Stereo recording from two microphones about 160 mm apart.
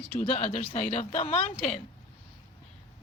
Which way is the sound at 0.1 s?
40° left (ahead or behind).